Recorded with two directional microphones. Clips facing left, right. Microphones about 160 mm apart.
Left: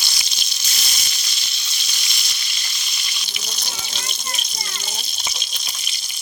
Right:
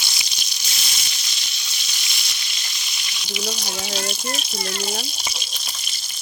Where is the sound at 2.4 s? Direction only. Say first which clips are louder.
Even; centre (ahead or behind).